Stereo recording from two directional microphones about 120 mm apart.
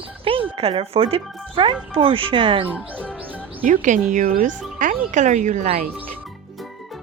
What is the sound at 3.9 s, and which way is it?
Speech, 90° right.